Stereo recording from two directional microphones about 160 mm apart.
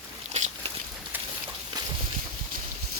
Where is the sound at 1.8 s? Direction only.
25° right (ahead or behind).